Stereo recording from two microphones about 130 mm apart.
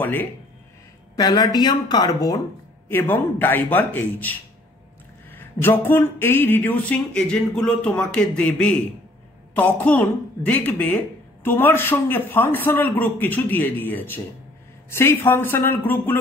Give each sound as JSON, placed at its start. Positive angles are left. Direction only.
{"t": 0.0, "sound": "speech", "side_deg": 15}
{"t": 1.1, "sound": "speech", "side_deg": 30}
{"t": 2.9, "sound": "speech", "side_deg": 15}